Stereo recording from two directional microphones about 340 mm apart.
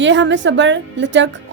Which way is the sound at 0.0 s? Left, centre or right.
Right.